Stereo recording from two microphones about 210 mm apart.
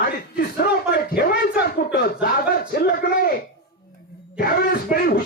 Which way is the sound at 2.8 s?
45° left (ahead or behind).